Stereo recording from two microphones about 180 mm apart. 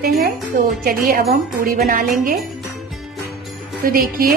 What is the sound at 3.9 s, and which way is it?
Speech, 55° right (ahead or behind).